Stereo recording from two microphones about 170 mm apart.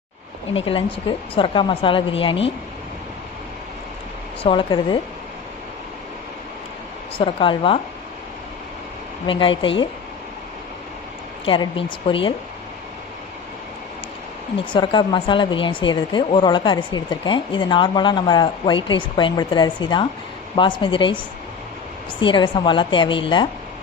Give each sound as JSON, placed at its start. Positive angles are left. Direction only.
{"t": 0.5, "sound": "a woman's voice", "side_deg": 30}
{"t": 4.4, "sound": "speech", "side_deg": 30}
{"t": 7.2, "sound": "a woman's voice", "side_deg": 30}
{"t": 9.2, "sound": "speech", "side_deg": 30}
{"t": 11.4, "sound": "a woman's voice", "side_deg": 30}
{"t": 14.6, "sound": "speech", "side_deg": 30}
{"t": 22.2, "sound": "speech", "side_deg": 30}